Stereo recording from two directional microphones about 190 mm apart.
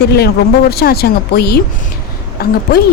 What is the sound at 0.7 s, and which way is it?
Speech, 55° left (ahead or behind).